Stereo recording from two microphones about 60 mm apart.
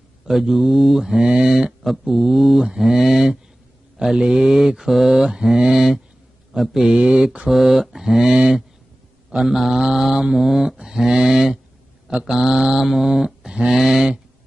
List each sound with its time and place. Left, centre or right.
0.3 s speech: centre
2.8 s mantra: centre
6.5 s speech: centre
7.0 s mantra: centre
10.3 s speech: centre
10.8 s mantra: centre